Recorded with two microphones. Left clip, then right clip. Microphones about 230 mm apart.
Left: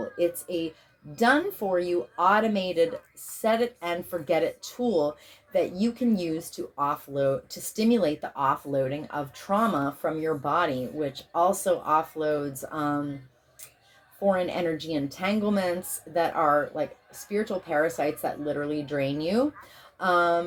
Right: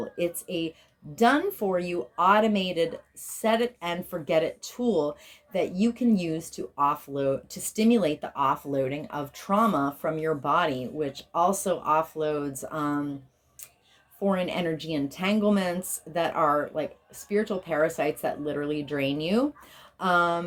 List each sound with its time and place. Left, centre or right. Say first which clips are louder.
0.2 s speech: left 3 dB; right
14.3 s speech: left 2 dB; right